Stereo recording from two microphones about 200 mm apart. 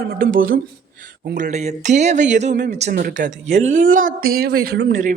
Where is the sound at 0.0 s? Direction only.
55° right (ahead or behind).